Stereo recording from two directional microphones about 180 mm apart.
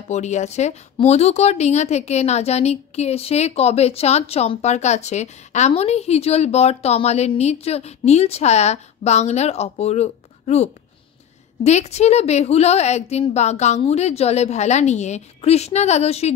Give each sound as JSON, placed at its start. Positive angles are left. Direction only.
{"t": 0.1, "sound": "speech", "side_deg": 40}